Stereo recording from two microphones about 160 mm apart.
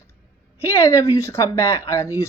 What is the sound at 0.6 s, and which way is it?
A woman's voice, 15° left (ahead or behind).